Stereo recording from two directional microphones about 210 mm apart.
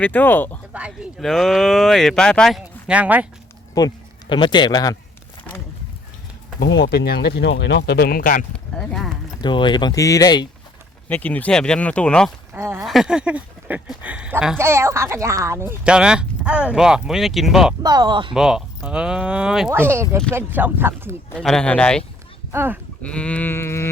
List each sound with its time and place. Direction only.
0.0 s sheep: 10° left (ahead or behind)
0.7 s speech: 5° right (ahead or behind)
3.8 s speech: 20° left (ahead or behind)
6.6 s speech: 55° left (ahead or behind)
8.5 s speech: 5° left (ahead or behind)
9.4 s speech: 20° left (ahead or behind)
11.1 s speech: 10° left (ahead or behind)
12.5 s speech: 10° right (ahead or behind)
17.8 s speech: 20° right (ahead or behind)
18.3 s speech: centre (ahead or behind)
21.2 s speech: 5° left (ahead or behind)
22.5 s speech: 10° right (ahead or behind)
23.0 s sheep: 5° left (ahead or behind)